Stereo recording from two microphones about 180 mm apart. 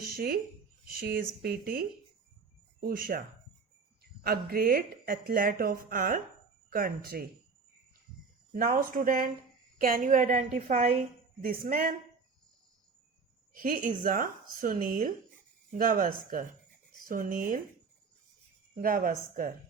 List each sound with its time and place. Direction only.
0.9 s speech: 55° right (ahead or behind)
2.8 s speech: 55° right (ahead or behind)
4.2 s speech: 55° right (ahead or behind)
8.5 s a woman's voice: 50° right (ahead or behind)
11.4 s speech: 55° right (ahead or behind)
13.5 s speech: 50° right (ahead or behind)
18.8 s speech: 50° right (ahead or behind)